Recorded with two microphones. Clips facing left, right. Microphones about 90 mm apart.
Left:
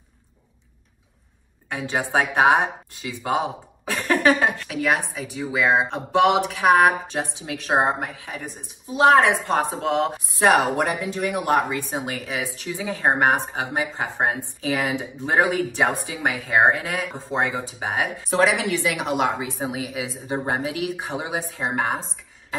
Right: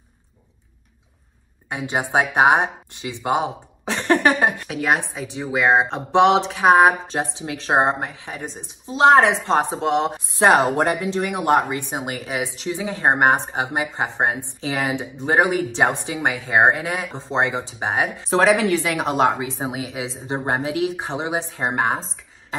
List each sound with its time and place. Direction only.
1.7 s a woman's voice: 15° right (ahead or behind)
4.8 s a woman's voice: 30° right (ahead or behind)
10.4 s a woman's voice: 30° right (ahead or behind)
19.5 s a woman's voice: 25° right (ahead or behind)